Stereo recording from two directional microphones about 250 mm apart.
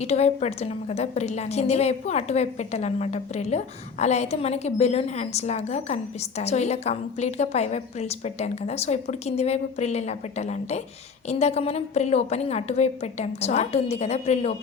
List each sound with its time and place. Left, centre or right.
0.0 s a woman's voice: left